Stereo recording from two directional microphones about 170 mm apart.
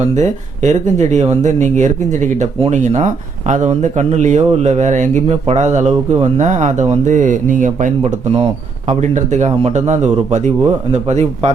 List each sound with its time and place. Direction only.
0.0 s speech: 45° right (ahead or behind)